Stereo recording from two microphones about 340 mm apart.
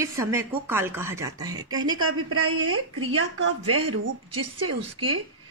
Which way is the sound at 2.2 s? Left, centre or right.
Right.